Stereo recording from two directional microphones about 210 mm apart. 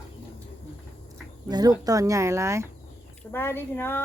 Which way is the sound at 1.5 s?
20° right (ahead or behind).